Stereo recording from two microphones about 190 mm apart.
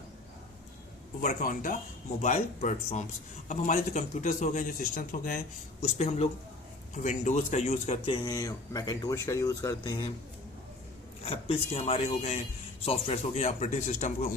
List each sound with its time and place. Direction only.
1.2 s speech: 45° left (ahead or behind); by 10.1 s 20° left (ahead or behind)
11.3 s speech: 30° left (ahead or behind)